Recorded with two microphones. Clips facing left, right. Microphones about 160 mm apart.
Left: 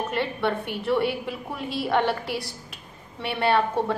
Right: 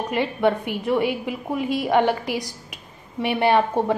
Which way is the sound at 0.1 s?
15° right (ahead or behind).